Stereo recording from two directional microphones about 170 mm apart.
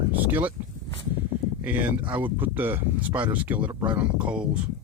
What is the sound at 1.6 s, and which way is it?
Speech, 10° right (ahead or behind).